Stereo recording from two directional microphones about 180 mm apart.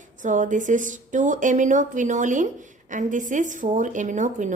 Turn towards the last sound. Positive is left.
turn(degrees=-45)  # may be behind; listen again after turning